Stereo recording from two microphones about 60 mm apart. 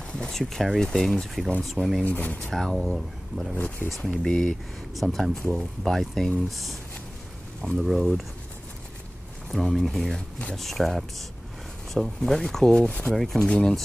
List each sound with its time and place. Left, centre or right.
0.1 s speech: centre
2.0 s speech: left
2.4 s speech: centre
3.5 s speech: left
4.0 s speech: centre
7.8 s speech: centre
9.5 s speech: centre
13.1 s speech: centre